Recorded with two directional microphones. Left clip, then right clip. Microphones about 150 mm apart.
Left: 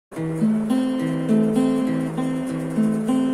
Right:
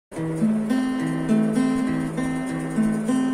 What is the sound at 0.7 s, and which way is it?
Music, 15° left (ahead or behind).